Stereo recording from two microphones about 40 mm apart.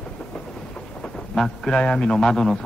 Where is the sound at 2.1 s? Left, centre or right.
Centre.